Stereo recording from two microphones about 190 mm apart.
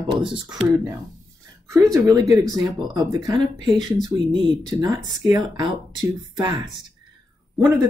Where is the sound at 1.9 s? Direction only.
20° right (ahead or behind).